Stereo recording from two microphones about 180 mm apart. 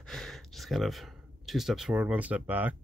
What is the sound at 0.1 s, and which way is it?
Speech, centre (ahead or behind).